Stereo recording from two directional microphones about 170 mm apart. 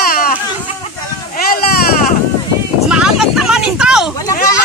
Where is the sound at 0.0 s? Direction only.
60° left (ahead or behind).